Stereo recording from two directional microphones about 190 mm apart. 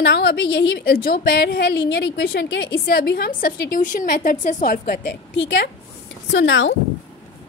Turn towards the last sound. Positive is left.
turn(degrees=90)